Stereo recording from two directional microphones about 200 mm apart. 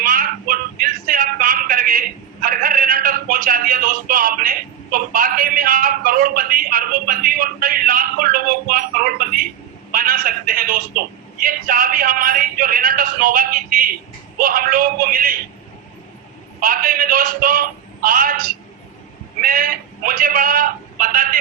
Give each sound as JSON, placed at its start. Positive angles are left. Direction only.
{"t": 0.0, "sound": "a sound", "side_deg": -45}
{"t": 9.9, "sound": "a man's voice", "side_deg": -45}
{"t": 16.6, "sound": "a man's voice", "side_deg": -45}